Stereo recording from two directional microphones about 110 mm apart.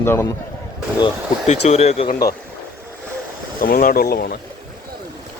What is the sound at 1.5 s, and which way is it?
Speech, 90° left.